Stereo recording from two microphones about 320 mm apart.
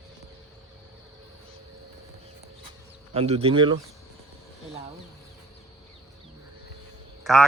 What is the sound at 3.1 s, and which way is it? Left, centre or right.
Speech, centre.